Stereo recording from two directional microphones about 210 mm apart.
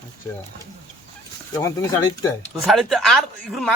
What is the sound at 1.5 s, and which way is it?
Speech, 15° left (ahead or behind).